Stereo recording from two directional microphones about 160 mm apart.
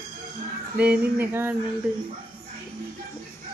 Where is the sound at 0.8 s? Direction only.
10° right (ahead or behind).